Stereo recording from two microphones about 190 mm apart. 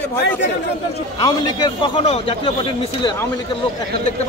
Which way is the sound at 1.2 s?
25° left (ahead or behind).